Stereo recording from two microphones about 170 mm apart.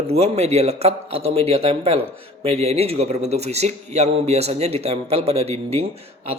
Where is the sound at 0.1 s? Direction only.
35° right (ahead or behind).